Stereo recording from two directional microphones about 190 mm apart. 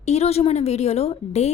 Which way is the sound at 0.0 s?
35° left (ahead or behind).